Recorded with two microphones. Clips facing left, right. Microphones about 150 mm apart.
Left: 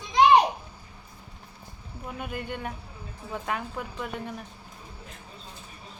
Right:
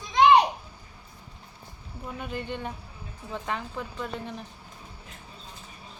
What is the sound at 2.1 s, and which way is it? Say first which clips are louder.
A woman's voice: right 1 dB; 10° left (ahead or behind).